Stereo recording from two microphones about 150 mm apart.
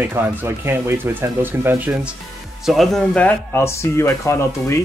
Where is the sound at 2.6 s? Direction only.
Centre (ahead or behind); by 4.4 s 15° left (ahead or behind).